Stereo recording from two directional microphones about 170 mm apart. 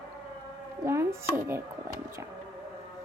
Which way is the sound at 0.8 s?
15° right (ahead or behind).